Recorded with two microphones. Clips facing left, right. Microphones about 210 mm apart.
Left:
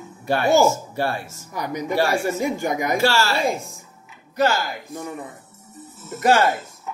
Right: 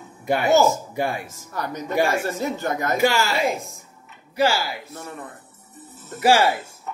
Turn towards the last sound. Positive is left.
turn(degrees=5)  # may be behind; listen again after turning